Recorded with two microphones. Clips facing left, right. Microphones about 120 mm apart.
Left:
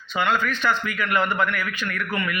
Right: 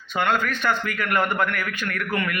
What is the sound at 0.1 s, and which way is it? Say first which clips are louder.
A man's voice: even; 50° right (ahead or behind).